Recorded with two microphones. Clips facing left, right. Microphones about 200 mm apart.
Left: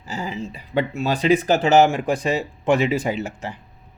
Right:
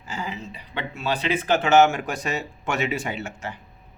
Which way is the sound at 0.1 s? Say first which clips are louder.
Left 4 dB; 40° left (ahead or behind).